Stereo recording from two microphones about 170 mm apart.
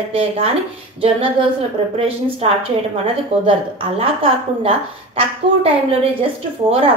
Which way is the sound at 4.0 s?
35° right (ahead or behind).